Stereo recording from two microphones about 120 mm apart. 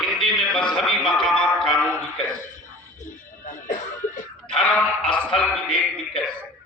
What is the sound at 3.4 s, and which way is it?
Music, 90° left.